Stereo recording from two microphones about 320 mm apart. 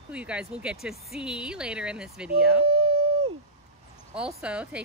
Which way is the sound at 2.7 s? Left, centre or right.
Centre.